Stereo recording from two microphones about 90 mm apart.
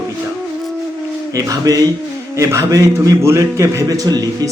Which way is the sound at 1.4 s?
40° right (ahead or behind).